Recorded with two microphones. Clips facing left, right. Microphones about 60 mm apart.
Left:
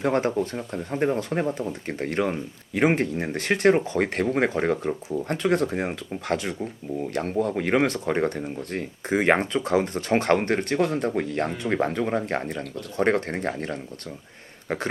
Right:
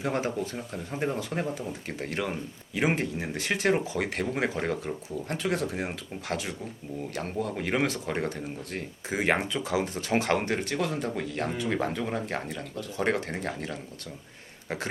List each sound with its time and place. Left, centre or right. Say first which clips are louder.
0.0 s speech: left 6 dB; left
0.9 s speech: left 6 dB; left
1.9 s speech: left 6 dB; left
5.6 s speech: left 5 dB; left
6.2 s speech: left 6 dB; left